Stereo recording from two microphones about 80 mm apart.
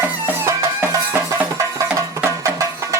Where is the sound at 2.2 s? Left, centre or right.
Right.